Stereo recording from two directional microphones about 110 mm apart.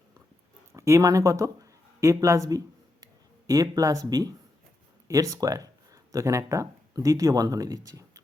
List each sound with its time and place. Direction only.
0.7 s speech: 25° right (ahead or behind)